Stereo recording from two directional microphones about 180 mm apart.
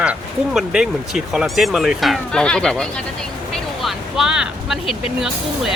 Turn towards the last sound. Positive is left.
turn(degrees=0)  # may be behind; listen again after turning